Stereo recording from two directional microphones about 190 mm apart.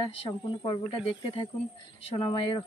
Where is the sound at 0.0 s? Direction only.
25° left (ahead or behind).